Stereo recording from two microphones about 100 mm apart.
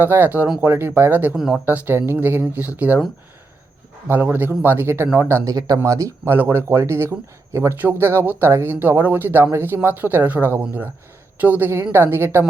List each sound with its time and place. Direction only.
0.0 s speech: 20° right (ahead or behind)
1.4 s speech: 5° right (ahead or behind)
1.6 s speech: 20° right (ahead or behind)
4.1 s speech: 20° right (ahead or behind)
5.5 s speech: 35° right (ahead or behind)